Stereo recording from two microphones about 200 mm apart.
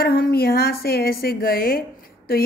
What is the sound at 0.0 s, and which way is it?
A woman's voice, 45° left (ahead or behind).